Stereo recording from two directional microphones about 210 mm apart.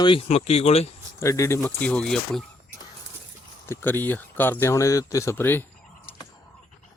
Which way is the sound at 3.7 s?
10° left (ahead or behind).